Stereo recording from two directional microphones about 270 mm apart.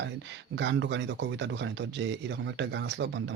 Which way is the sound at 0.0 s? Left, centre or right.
Right.